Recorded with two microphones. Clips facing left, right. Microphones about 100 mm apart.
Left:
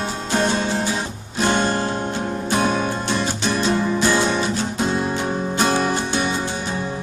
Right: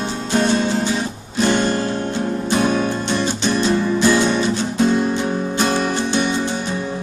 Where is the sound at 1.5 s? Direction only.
25° left (ahead or behind).